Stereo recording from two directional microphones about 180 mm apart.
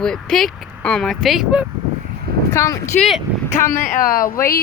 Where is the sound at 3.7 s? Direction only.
50° left (ahead or behind).